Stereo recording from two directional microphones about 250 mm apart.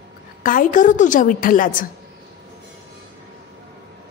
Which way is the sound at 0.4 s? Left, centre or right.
Left.